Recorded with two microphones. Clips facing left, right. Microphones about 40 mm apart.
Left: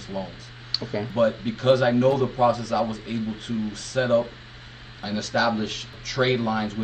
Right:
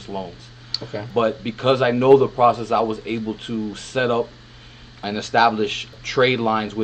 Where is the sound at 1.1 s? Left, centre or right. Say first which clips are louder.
Right 2 dB; right.